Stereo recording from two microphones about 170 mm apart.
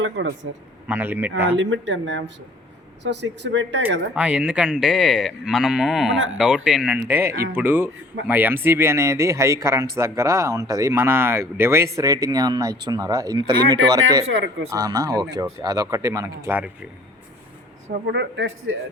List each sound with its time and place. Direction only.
0.0 s speech: 90° right
0.9 s speech: 10° right (ahead or behind)
1.5 s speech: 90° right
4.1 s livestock: 5° right (ahead or behind)
7.5 s speech: 10° right (ahead or behind)
18.0 s speech: 90° right